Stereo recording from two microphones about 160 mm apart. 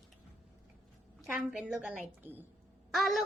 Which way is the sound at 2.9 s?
Centre (ahead or behind).